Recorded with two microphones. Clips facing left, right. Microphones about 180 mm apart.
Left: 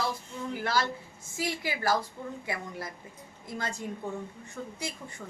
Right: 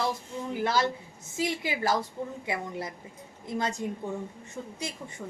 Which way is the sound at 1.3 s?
20° right (ahead or behind).